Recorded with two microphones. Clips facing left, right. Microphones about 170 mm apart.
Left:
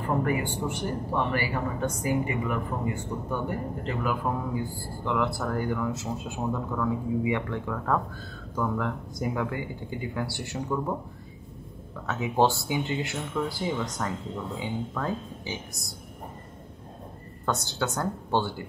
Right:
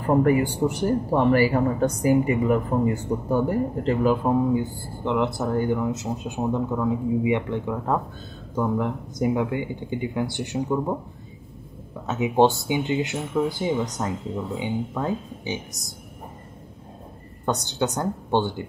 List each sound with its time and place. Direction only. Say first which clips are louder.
0.0 s a man's voice: right 8 dB; 40° right (ahead or behind); by 11.0 s 20° right (ahead or behind)
12.1 s a man's voice: right 5 dB; 20° right (ahead or behind)
17.5 s a man's voice: right 4 dB; 20° right (ahead or behind)